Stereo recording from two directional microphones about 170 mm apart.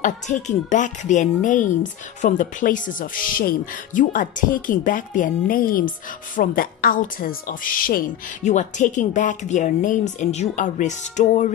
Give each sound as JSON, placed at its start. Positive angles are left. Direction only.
{"t": 0.0, "sound": "a child's voice", "side_deg": 45}
{"t": 8.5, "sound": "a child's voice", "side_deg": 45}